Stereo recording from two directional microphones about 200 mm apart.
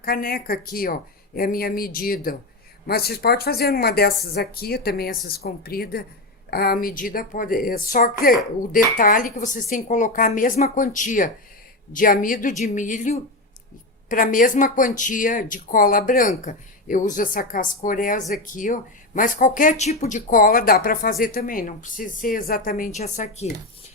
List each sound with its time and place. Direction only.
0.0 s speech: 50° left (ahead or behind)